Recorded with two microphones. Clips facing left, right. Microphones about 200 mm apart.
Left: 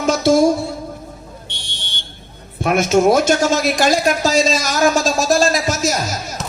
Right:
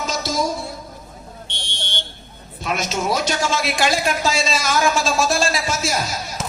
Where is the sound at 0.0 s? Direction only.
55° left (ahead or behind).